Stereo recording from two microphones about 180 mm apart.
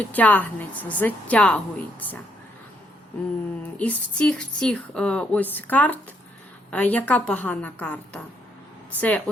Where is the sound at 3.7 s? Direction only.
10° left (ahead or behind).